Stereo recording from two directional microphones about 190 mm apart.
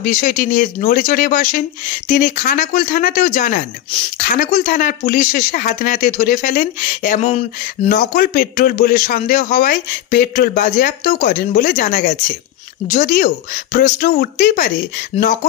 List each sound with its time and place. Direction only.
0.0 s a man's voice: 45° left (ahead or behind)